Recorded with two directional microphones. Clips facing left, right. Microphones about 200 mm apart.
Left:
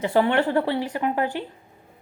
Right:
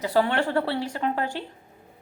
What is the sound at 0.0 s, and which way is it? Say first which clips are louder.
A woman's voice: left 3 dB; 20° left (ahead or behind).